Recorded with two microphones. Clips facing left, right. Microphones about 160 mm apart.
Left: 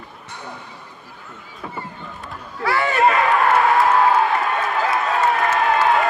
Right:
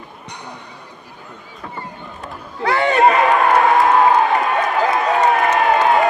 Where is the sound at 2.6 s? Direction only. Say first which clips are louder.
Right 4 dB; 20° right (ahead or behind).